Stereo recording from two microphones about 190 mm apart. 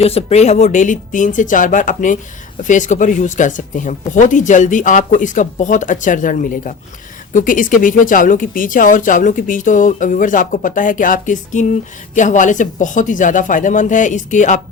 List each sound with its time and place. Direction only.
0.0 s speech: 35° left (ahead or behind)